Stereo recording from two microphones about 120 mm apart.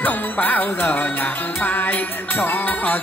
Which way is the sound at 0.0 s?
15° left (ahead or behind).